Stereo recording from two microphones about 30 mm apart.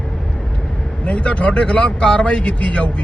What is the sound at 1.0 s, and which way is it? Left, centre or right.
A man's voice, left.